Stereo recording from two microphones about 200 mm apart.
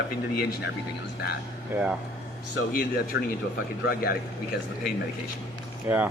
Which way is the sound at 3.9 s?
50° left (ahead or behind).